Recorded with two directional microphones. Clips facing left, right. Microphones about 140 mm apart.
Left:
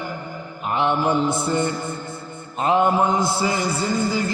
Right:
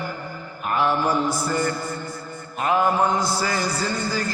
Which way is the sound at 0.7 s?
25° left (ahead or behind).